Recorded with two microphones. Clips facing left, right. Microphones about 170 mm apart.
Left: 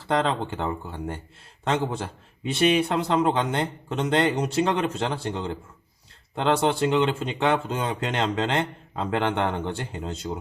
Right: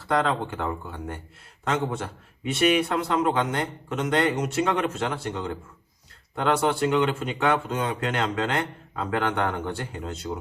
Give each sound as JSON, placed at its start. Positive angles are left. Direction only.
{"t": 0.1, "sound": "a man's voice", "side_deg": 30}